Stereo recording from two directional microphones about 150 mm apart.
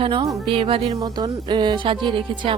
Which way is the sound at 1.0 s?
30° right (ahead or behind).